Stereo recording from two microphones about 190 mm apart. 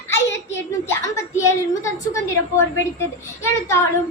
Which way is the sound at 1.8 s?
15° left (ahead or behind).